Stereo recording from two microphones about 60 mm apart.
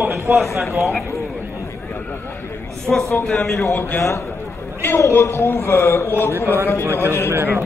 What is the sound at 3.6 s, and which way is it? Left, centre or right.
Speech, left.